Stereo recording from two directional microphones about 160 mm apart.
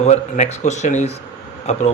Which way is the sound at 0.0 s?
45° left (ahead or behind).